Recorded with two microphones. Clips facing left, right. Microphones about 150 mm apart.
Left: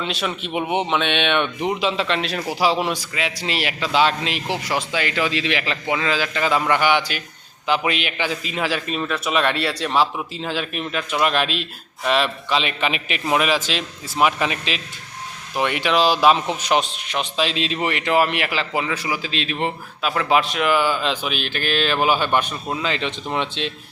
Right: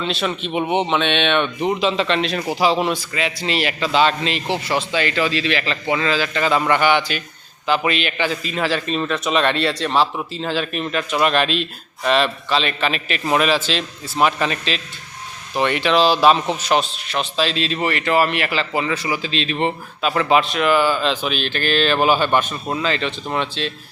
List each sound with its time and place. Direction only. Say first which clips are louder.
0.0 s a man's voice: right 3 dB; 10° left (ahead or behind)